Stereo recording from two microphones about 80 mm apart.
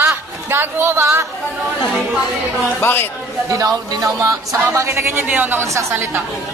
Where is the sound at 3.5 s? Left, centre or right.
Right.